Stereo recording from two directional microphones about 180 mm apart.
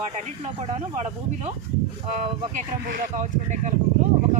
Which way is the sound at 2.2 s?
45° right (ahead or behind).